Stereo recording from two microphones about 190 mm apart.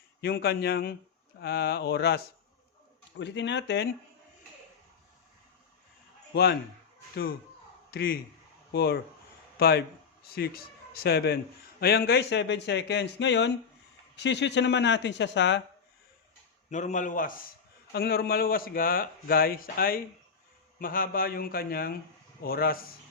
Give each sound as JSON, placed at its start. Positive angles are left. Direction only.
{"t": 0.2, "sound": "speech", "side_deg": 55}
{"t": 6.3, "sound": "speech", "side_deg": 55}
{"t": 7.9, "sound": "a man's voice", "side_deg": 55}
{"t": 16.6, "sound": "a man's voice", "side_deg": 40}
{"t": 17.9, "sound": "a man's voice", "side_deg": 55}